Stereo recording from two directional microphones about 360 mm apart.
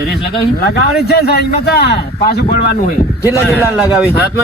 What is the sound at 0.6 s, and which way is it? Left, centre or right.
A man's voice, left.